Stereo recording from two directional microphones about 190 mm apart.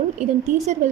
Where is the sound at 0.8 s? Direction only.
40° right (ahead or behind).